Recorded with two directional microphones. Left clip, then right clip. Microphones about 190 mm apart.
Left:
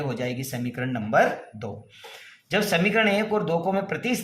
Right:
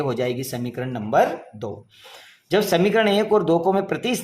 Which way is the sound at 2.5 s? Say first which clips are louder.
Right 4 dB; 35° right (ahead or behind).